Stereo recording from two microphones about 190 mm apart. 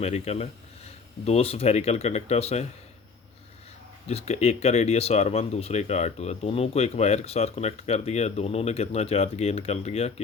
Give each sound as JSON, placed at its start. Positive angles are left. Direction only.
{"t": 0.0, "sound": "speech", "side_deg": 35}
{"t": 4.1, "sound": "speech", "side_deg": 35}